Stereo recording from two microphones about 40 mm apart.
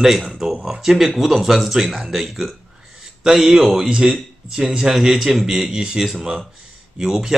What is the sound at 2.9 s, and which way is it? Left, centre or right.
A man's voice, centre.